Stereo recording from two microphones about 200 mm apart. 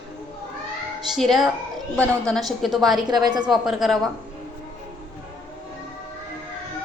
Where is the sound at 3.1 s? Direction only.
20° right (ahead or behind).